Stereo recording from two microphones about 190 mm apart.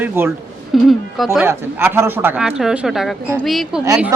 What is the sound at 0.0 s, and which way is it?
Speech, 10° right (ahead or behind).